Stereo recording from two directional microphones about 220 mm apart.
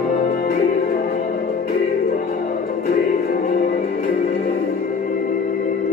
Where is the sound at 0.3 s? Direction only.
40° left (ahead or behind).